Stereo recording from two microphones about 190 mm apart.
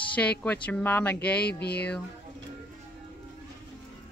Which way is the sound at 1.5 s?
60° left (ahead or behind).